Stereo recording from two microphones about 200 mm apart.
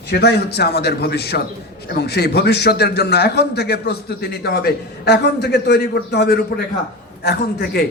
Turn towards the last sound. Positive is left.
turn(degrees=55)  # may be behind; listen again after turning